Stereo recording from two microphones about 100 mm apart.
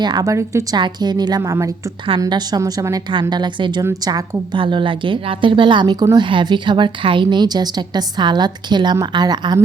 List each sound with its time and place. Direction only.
0.0 s a woman's voice: 45° right (ahead or behind)
0.3 s a woman's voice: 30° right (ahead or behind)
0.8 s a woman's voice: 45° right (ahead or behind)
1.4 s speech: 30° right (ahead or behind)
2.1 s a woman's voice: 60° right (ahead or behind)
2.6 s a woman's voice: 35° right (ahead or behind)
3.1 s a woman's voice: 50° right (ahead or behind)
4.5 s a woman's voice: 55° right (ahead or behind)